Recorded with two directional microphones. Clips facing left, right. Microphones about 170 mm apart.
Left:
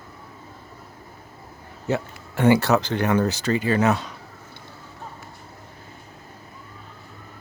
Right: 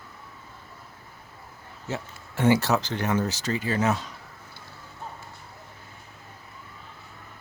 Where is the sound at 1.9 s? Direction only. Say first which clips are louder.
Left 8 dB; 60° left (ahead or behind).